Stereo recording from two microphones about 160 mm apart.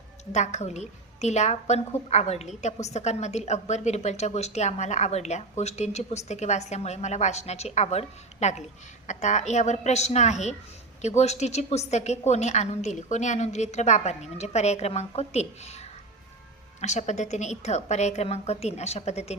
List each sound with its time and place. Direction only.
0.3 s a woman's voice: 45° left (ahead or behind)